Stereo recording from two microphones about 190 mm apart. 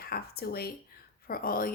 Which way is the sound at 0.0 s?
55° left (ahead or behind).